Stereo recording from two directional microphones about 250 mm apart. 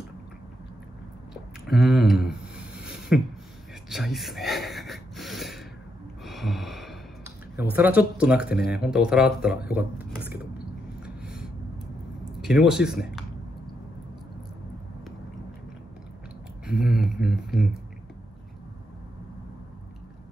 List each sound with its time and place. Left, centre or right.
1.3 s a sound: centre
3.9 s speech: centre
6.2 s gasp: centre
7.7 s speech: centre
8.5 s speech: left
8.7 s speech: centre
9.7 s a sound: centre
12.3 s speech: centre
16.6 s speech: centre